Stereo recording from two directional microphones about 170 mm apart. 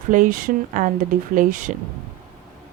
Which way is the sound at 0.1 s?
55° right (ahead or behind).